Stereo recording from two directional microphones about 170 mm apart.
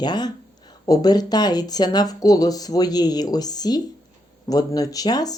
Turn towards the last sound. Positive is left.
turn(degrees=20)  # may be behind; listen again after turning